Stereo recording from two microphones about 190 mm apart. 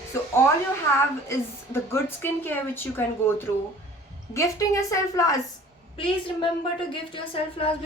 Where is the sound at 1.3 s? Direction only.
15° left (ahead or behind).